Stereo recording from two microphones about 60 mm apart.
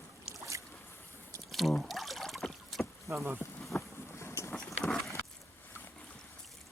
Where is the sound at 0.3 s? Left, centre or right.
Right.